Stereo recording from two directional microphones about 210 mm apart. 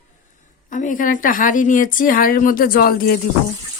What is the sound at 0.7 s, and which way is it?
Speech, 40° left (ahead or behind).